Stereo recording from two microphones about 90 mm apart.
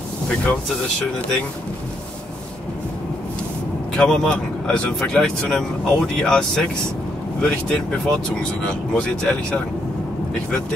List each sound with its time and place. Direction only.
3.9 s speech: 5° left (ahead or behind)